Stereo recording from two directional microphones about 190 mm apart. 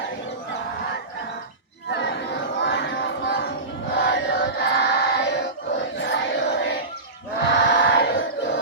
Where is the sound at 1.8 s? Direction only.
65° left (ahead or behind).